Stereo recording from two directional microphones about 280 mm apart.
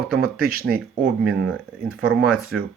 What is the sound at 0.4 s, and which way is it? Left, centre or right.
Speech, right.